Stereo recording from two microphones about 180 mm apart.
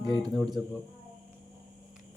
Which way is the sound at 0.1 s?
20° right (ahead or behind).